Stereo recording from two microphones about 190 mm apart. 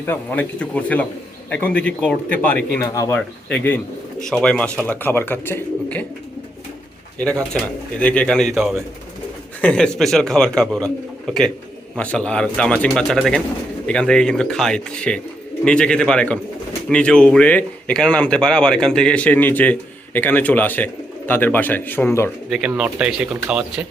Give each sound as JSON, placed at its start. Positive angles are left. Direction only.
{"t": 0.0, "sound": "a man's voice", "side_deg": 10}
{"t": 7.9, "sound": "a man's voice", "side_deg": 5}
{"t": 22.4, "sound": "speech", "side_deg": -5}